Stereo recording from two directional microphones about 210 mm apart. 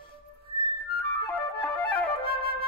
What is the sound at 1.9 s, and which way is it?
Flute, 45° left (ahead or behind).